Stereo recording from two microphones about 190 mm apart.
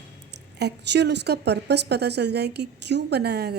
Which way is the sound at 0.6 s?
60° right (ahead or behind).